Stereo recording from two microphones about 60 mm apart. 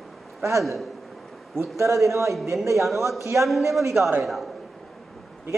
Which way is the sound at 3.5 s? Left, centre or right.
Centre.